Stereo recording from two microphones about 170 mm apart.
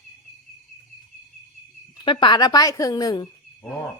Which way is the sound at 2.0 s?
30° left (ahead or behind).